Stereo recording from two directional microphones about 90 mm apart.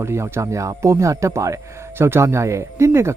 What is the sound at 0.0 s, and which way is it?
Speech, 30° right (ahead or behind).